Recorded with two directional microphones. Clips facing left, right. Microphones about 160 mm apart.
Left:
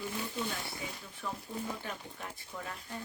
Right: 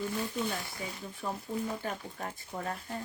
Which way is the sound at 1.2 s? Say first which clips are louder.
Right 4 dB; 35° right (ahead or behind).